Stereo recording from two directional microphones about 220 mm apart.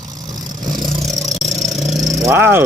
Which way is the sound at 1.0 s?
Centre (ahead or behind).